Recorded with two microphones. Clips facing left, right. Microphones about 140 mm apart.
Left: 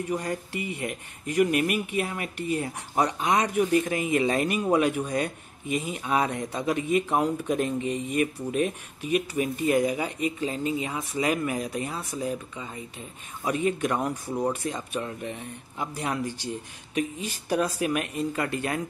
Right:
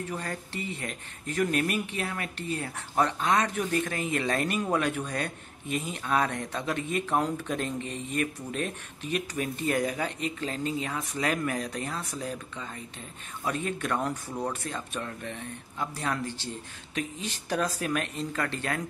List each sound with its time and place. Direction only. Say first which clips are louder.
0.0 s speech: left 5 dB; 15° left (ahead or behind)